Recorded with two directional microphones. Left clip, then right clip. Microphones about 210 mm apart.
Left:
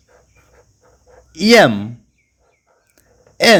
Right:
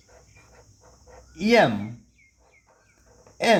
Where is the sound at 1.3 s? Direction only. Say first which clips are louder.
Left 9 dB; 45° left (ahead or behind).